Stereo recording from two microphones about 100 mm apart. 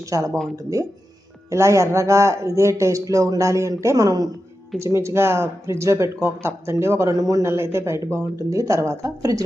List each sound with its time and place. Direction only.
0.1 s speech: 30° right (ahead or behind)